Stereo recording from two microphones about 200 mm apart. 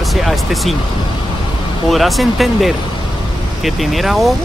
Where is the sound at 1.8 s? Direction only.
Centre (ahead or behind).